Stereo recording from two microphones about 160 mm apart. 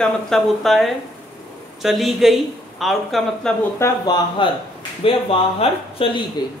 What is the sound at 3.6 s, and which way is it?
Speech, 15° left (ahead or behind).